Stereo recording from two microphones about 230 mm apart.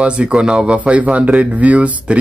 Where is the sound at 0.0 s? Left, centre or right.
Centre.